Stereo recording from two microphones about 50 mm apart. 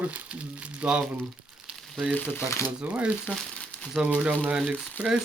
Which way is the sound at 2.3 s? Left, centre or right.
Left.